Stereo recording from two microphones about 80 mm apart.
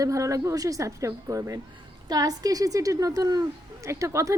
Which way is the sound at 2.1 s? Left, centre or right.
Right.